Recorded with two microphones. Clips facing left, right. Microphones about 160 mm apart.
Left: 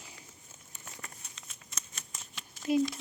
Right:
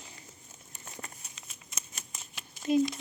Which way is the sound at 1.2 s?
5° right (ahead or behind).